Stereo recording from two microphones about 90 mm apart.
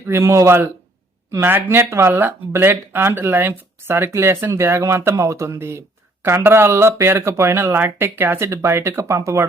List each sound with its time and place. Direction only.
0.1 s speech: 30° right (ahead or behind)